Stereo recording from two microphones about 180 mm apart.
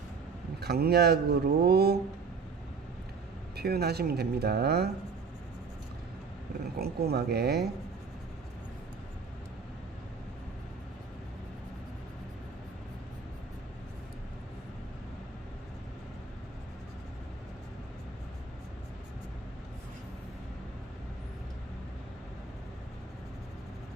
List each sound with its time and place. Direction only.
0.6 s speech: 60° right (ahead or behind)
3.5 s speech: 60° right (ahead or behind)
6.7 s speech: 60° right (ahead or behind)